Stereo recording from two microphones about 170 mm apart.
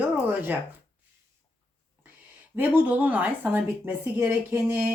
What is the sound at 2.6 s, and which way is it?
Speech, 10° right (ahead or behind).